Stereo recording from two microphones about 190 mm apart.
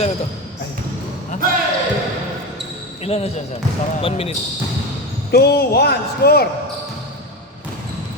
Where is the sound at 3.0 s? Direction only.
30° left (ahead or behind).